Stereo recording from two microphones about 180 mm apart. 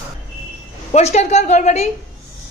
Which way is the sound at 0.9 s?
35° left (ahead or behind).